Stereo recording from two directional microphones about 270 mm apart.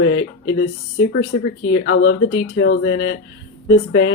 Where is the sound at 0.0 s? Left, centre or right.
Left.